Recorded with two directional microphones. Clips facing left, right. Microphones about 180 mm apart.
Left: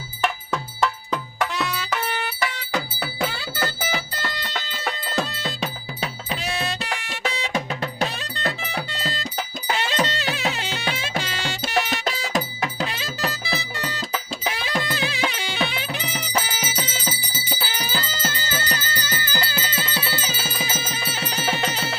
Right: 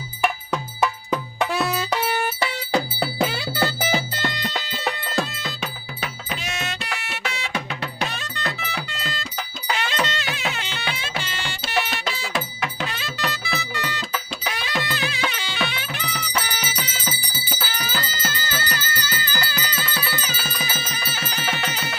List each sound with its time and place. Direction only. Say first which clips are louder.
0.2 s music: right 1 dB; 10° right (ahead or behind)
2.7 s music: right 7 dB; 35° right (ahead or behind)
3.2 s music: right 3 dB; 15° right (ahead or behind)
5.3 s music: left 3 dB; 30° left (ahead or behind)